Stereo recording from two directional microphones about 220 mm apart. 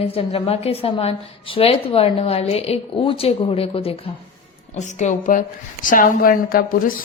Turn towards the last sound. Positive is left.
turn(degrees=40)  # may be behind; listen again after turning